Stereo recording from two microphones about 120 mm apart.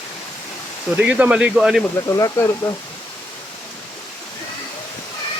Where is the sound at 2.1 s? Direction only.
30° left (ahead or behind).